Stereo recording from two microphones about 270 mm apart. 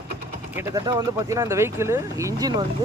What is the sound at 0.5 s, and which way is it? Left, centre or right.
Speech, centre.